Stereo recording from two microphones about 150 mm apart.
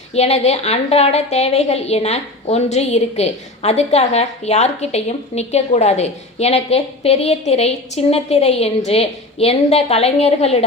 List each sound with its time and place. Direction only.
0.1 s a woman's voice: 45° left (ahead or behind)